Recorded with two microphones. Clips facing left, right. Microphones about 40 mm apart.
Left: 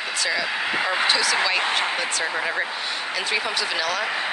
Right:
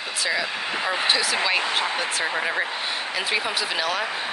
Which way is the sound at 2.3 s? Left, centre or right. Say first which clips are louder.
Even; centre.